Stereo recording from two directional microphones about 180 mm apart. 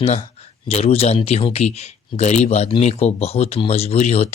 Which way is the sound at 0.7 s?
35° left (ahead or behind).